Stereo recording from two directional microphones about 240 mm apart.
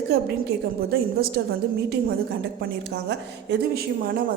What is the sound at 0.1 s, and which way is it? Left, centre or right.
A woman's voice, right.